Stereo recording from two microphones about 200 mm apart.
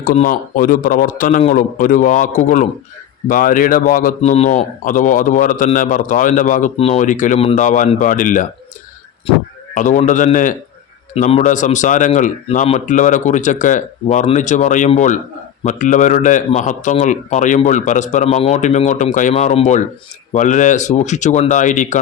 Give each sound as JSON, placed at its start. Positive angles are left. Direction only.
{"t": 0.0, "sound": "a man's voice", "side_deg": 45}
{"t": 9.7, "sound": "a man's voice", "side_deg": 40}